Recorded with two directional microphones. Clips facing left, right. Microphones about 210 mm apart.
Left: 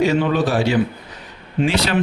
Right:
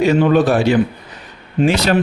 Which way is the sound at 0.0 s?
55° right (ahead or behind).